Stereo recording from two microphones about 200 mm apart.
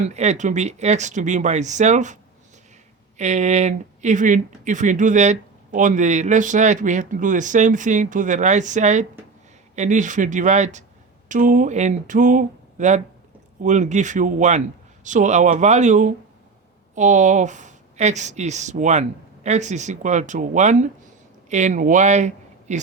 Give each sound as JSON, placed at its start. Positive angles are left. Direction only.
{"t": 0.0, "sound": "speech", "side_deg": -35}
{"t": 3.2, "sound": "speech", "side_deg": -35}